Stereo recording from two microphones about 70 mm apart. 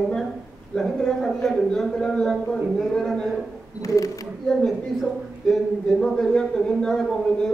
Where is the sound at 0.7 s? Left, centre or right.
Centre.